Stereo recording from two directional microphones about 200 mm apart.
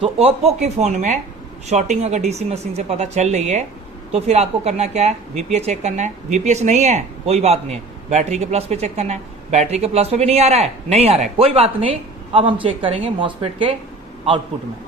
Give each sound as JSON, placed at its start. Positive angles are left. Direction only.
{"t": 0.0, "sound": "speech", "side_deg": -30}